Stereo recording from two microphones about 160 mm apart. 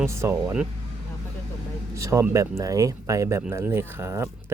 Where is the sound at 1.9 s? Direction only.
20° right (ahead or behind).